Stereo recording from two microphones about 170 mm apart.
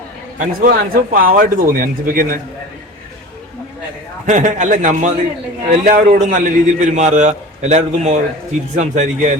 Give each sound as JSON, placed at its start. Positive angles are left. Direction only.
{"t": 0.3, "sound": "a man's voice", "side_deg": -55}
{"t": 4.3, "sound": "a man's voice", "side_deg": -50}